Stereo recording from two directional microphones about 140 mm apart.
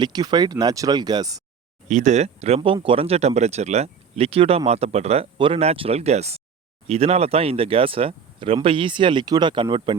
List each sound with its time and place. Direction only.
0.0 s speech: 30° right (ahead or behind)
1.9 s speech: 60° right (ahead or behind)
2.6 s speech: 35° right (ahead or behind)